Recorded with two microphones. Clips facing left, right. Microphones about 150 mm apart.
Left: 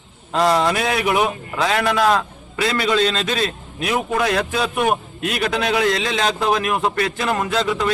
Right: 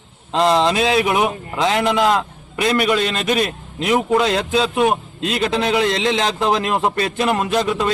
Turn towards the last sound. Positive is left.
turn(degrees=-20)  # may be behind; listen again after turning